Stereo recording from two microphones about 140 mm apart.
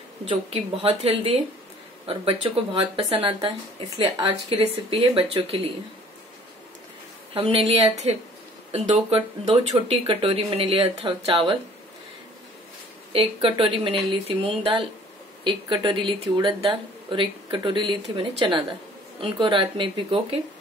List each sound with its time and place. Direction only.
0.2 s speech: 40° right (ahead or behind)
7.3 s speech: 45° right (ahead or behind)
13.1 s speech: 40° right (ahead or behind)